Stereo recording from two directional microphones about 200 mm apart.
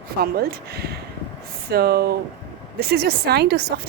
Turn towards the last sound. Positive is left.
turn(degrees=-55)  # may be behind; listen again after turning